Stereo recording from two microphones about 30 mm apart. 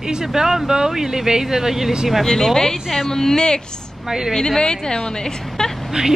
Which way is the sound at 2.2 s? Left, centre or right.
Centre.